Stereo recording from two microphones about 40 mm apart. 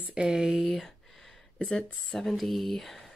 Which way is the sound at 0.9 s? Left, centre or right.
Centre.